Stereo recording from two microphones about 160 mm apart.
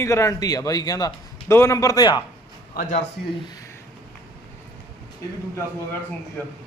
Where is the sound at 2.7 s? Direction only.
55° left (ahead or behind).